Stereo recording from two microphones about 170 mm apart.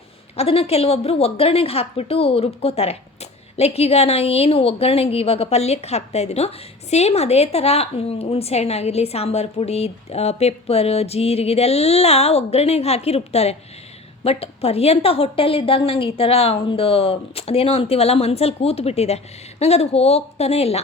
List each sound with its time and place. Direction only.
0.3 s a woman's voice: 35° left (ahead or behind)